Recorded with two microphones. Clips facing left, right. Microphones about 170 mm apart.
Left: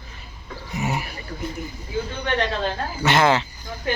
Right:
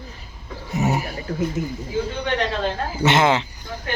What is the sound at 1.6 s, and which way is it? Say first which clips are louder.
Speech: right 7 dB; 90° right.